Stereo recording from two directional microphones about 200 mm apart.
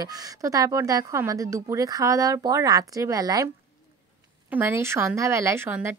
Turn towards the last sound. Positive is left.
turn(degrees=-10)  # may be behind; listen again after turning